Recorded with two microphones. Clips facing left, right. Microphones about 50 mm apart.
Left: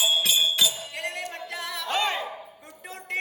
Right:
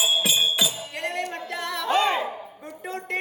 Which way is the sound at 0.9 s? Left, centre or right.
Centre.